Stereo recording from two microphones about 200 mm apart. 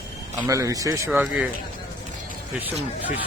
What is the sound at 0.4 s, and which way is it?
Speech, 15° right (ahead or behind).